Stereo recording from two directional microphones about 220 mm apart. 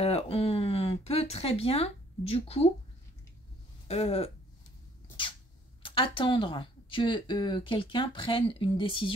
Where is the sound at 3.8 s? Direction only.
30° left (ahead or behind).